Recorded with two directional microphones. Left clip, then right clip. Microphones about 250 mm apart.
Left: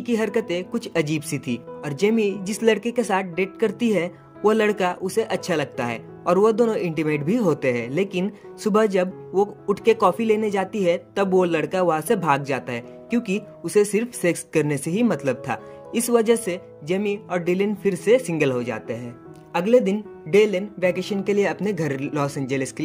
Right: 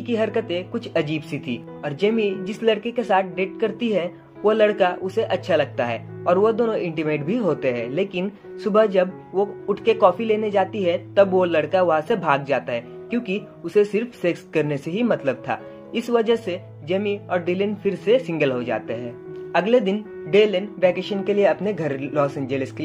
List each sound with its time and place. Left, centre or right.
0.0 s speech: left